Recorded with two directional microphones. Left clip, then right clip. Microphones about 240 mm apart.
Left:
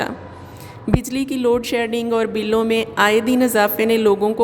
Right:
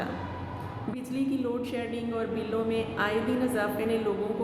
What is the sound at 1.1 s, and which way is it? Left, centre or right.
Speech, left.